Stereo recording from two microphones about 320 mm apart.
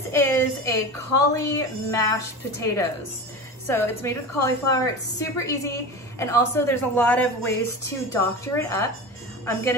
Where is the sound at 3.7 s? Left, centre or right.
Centre.